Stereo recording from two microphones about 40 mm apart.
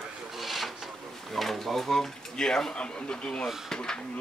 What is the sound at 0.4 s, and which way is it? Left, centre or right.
Wood, centre.